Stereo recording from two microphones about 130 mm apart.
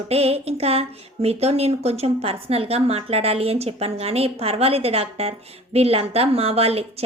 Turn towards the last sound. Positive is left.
turn(degrees=-50)  # may be behind; listen again after turning